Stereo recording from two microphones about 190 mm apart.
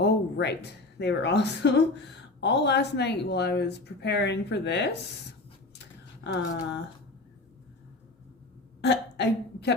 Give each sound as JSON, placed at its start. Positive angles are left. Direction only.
{"t": 0.0, "sound": "speech", "side_deg": 60}
{"t": 6.2, "sound": "speech", "side_deg": 70}
{"t": 8.8, "sound": "speech", "side_deg": 65}